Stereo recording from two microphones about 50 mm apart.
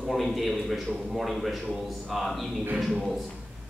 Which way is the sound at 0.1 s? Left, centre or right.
Centre.